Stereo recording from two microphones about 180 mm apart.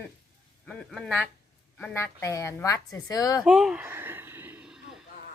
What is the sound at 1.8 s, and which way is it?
Speech, 15° left (ahead or behind).